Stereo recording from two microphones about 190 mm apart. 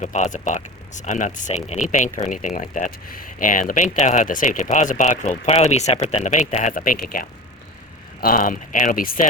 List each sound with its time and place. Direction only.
0.0 s speech: 40° left (ahead or behind)